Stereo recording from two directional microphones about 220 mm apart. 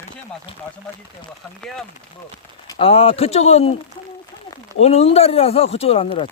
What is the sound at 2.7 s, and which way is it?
Speech, 25° left (ahead or behind).